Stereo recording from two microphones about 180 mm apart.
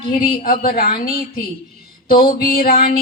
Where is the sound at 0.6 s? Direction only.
55° left (ahead or behind).